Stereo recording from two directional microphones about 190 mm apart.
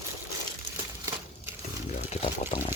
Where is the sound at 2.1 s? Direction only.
30° left (ahead or behind).